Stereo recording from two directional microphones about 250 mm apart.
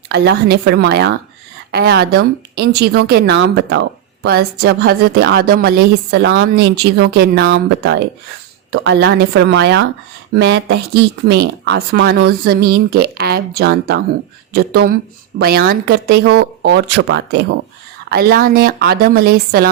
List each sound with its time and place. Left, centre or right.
0.1 s speech: right